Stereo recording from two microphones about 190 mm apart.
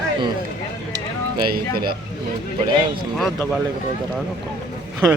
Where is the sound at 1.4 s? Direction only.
55° right (ahead or behind).